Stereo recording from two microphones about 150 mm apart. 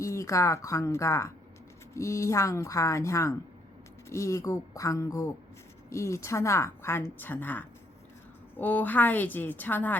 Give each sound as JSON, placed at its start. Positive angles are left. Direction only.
{"t": 0.0, "sound": "a woman's voice", "side_deg": 20}